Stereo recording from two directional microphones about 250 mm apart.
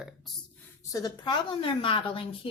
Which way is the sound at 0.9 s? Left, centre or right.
Centre.